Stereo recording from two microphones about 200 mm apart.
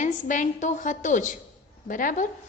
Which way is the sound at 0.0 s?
40° left (ahead or behind).